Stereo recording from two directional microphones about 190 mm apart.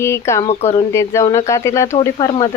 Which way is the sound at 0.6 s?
35° left (ahead or behind).